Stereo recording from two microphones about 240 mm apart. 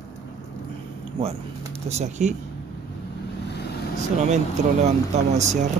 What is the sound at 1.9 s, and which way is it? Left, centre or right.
Speech, right.